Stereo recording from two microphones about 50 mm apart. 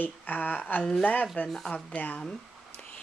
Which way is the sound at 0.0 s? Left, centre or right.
Left.